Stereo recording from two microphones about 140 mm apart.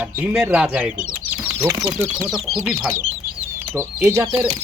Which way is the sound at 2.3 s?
Centre (ahead or behind).